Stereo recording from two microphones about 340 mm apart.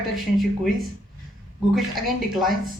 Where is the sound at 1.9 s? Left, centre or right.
Centre.